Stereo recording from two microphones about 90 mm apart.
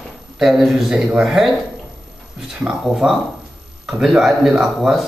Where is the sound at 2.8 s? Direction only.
5° right (ahead or behind).